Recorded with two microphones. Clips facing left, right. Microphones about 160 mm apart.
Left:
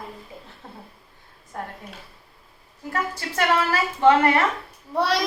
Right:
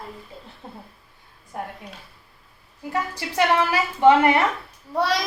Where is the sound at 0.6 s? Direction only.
20° right (ahead or behind).